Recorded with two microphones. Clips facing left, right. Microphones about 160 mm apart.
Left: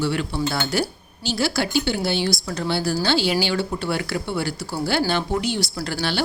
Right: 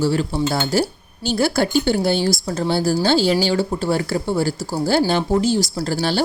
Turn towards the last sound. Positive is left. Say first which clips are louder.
# right 6 dB
turn(degrees=-40)  # may be behind; listen again after turning